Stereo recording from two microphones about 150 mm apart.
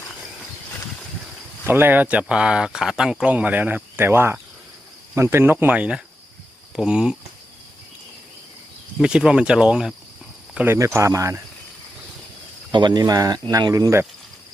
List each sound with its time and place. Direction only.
1.6 s speech: 15° right (ahead or behind)
9.0 s speech: 5° right (ahead or behind)
12.7 s speech: 30° right (ahead or behind)